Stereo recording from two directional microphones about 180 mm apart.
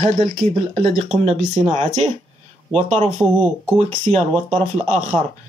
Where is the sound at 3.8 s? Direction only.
35° right (ahead or behind).